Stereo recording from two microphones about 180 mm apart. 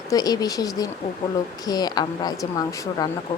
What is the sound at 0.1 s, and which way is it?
Speech, 20° left (ahead or behind).